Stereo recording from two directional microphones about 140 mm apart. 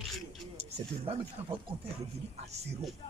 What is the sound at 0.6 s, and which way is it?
Speech, 45° right (ahead or behind).